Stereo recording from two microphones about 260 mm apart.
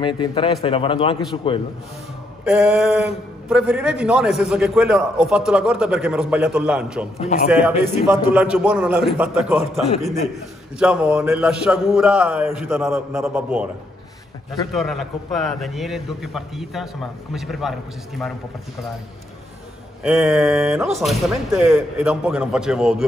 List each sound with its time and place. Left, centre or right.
0.0 s a man's voice: centre
2.4 s a man's voice: centre
7.2 s a man's voice: left
7.8 s a man's voice: centre
10.8 s a man's voice: centre
20.0 s a man's voice: centre